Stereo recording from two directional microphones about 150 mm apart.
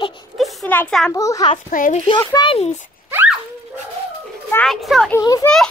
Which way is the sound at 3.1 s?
10° right (ahead or behind).